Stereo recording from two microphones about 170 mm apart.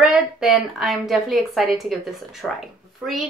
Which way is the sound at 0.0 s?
5° right (ahead or behind).